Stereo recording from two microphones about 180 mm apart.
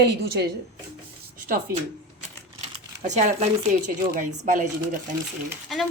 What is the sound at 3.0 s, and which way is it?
Speech, 40° right (ahead or behind).